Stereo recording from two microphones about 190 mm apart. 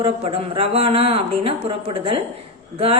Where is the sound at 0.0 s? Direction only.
30° right (ahead or behind).